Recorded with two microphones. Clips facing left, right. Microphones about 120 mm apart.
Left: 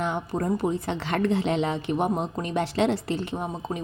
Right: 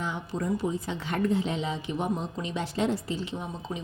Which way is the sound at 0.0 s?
55° left (ahead or behind).